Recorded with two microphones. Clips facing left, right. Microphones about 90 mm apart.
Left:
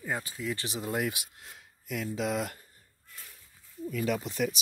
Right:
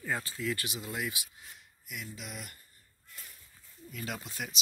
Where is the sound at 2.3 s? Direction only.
90° left.